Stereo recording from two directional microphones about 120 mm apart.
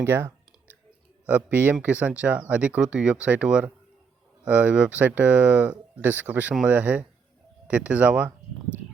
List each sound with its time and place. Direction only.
0.0 s speech: 20° right (ahead or behind)